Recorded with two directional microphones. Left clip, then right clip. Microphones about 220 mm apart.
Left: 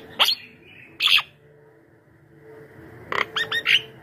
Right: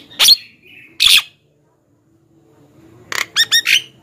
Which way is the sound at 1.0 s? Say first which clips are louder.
Right 8 dB; 10° right (ahead or behind).